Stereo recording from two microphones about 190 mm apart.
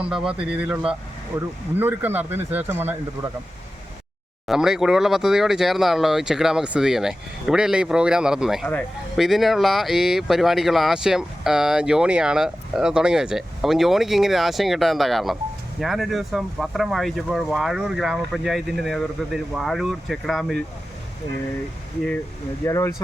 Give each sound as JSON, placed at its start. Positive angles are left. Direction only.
{"t": 0.0, "sound": "speech", "side_deg": -5}
{"t": 4.4, "sound": "speech", "side_deg": -5}
{"t": 22.6, "sound": "speech", "side_deg": 15}